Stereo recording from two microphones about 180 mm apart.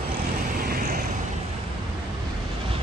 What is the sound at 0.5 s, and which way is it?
Vehicle, 55° right (ahead or behind).